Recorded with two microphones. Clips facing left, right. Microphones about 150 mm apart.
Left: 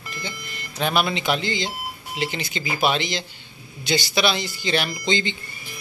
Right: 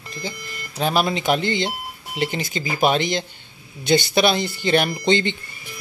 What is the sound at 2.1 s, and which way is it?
Speech, 45° right (ahead or behind).